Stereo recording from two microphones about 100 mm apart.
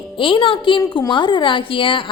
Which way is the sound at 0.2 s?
60° left (ahead or behind).